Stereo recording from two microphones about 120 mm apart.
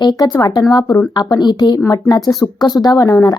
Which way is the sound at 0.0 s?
35° left (ahead or behind).